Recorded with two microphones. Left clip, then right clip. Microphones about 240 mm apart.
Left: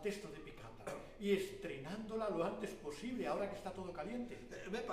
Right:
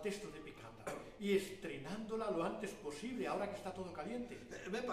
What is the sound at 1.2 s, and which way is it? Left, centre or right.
A man's voice, left.